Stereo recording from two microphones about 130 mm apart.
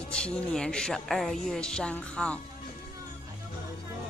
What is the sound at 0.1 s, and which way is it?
Speech, 5° left (ahead or behind).